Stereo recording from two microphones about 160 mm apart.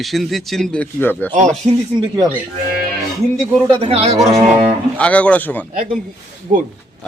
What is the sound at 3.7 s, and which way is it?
Speech, 40° right (ahead or behind).